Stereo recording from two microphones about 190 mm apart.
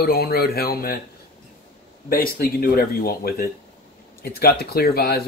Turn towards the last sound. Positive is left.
turn(degrees=55)  # may be behind; listen again after turning